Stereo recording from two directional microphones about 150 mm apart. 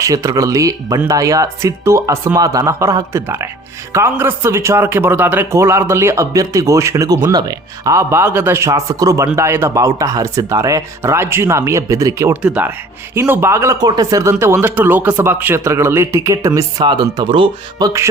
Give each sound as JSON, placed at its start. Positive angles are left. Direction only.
{"t": 0.0, "sound": "a man's voice", "side_deg": -20}
{"t": 12.4, "sound": "a man's voice", "side_deg": -10}
{"t": 17.8, "sound": "a man's voice", "side_deg": -20}